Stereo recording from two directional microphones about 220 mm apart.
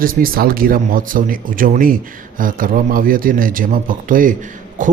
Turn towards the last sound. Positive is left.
turn(degrees=-35)  # may be behind; listen again after turning